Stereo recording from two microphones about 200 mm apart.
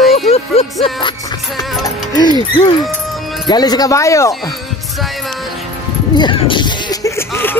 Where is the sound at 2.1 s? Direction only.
20° left (ahead or behind).